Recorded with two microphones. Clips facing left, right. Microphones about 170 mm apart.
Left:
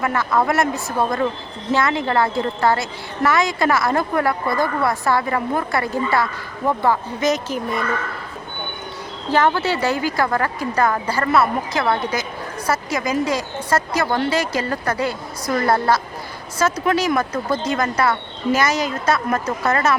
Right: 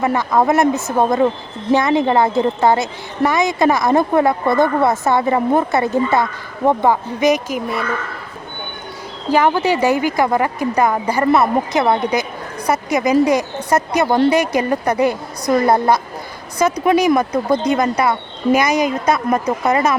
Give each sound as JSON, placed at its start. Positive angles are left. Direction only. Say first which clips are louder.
{"t": 0.0, "sound": "a woman's voice", "louder": "right 4 dB", "side_deg": -20}
{"t": 9.3, "sound": "a woman's voice", "louder": "right 3 dB", "side_deg": -15}